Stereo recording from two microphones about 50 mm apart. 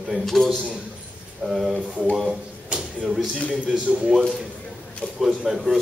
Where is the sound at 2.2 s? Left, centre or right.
Centre.